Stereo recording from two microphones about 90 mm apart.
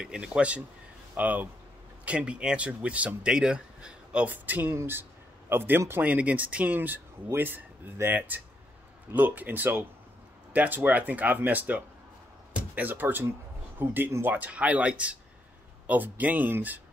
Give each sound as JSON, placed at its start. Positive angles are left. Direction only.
{"t": 0.0, "sound": "speech", "side_deg": -10}